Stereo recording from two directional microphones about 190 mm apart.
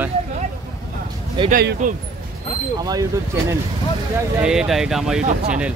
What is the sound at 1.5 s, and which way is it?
Speech, 50° right (ahead or behind).